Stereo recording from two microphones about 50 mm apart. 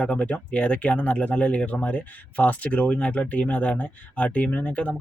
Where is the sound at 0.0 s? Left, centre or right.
Left.